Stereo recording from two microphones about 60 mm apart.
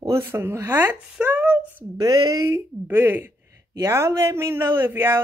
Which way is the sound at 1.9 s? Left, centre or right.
Right.